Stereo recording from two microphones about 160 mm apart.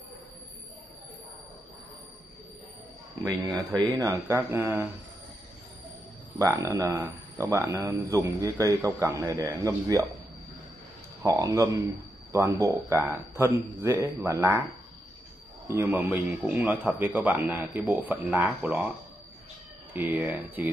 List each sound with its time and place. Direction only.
4.0 s a man's voice: 20° right (ahead or behind)
6.3 s speech: 20° right (ahead or behind)
11.2 s a man's voice: 20° right (ahead or behind)
15.7 s a man's voice: 15° right (ahead or behind)
19.9 s a man's voice: 10° right (ahead or behind)